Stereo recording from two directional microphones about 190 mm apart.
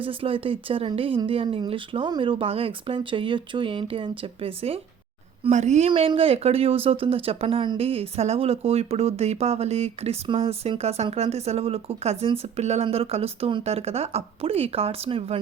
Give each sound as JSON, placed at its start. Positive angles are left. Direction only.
{"t": 0.0, "sound": "speech", "side_deg": -30}